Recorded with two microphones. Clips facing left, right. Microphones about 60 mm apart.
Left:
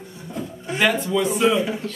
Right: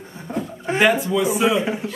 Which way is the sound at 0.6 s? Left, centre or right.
Right.